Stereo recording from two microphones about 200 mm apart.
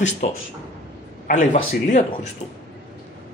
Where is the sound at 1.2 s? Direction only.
40° left (ahead or behind).